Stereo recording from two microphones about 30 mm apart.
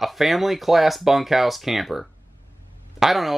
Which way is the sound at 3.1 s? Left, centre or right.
Centre.